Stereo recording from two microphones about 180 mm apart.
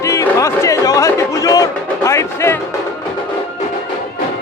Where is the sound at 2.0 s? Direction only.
15° left (ahead or behind).